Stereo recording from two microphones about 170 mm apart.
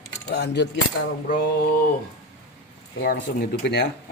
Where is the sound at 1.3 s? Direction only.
65° left (ahead or behind).